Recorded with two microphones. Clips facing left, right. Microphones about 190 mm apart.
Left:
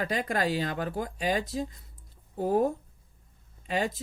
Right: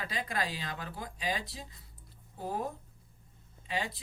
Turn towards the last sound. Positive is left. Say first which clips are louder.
# left 7 dB
turn(degrees=45)  # may be behind; listen again after turning